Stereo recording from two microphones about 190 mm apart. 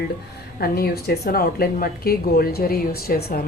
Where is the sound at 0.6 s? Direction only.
55° left (ahead or behind).